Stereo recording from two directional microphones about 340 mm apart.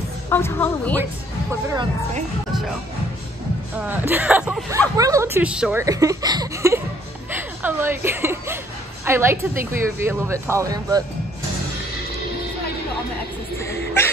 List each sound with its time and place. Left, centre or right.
0.3 s speech: centre
1.5 s speech: centre
3.7 s speech: centre
13.6 s music: centre